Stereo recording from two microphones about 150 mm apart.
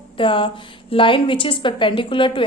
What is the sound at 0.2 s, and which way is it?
A woman's voice, 35° left (ahead or behind).